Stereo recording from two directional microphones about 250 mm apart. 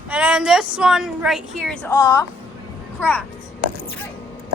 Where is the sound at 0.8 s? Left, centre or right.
Centre.